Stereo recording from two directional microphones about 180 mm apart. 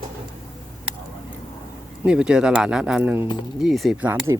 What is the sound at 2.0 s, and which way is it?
Speech, 5° right (ahead or behind).